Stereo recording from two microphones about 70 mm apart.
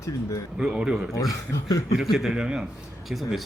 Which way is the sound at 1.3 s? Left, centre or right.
Left.